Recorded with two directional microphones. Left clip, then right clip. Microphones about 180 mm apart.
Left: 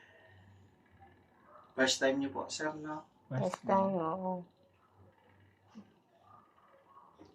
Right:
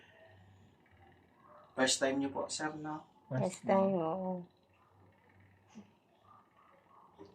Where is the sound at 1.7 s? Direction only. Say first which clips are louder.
Left 1 dB; 30° right (ahead or behind).